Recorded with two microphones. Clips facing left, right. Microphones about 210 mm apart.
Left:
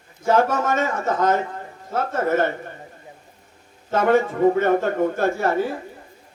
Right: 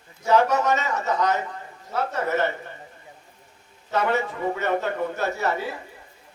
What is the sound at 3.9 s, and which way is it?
A man's voice, 50° left (ahead or behind).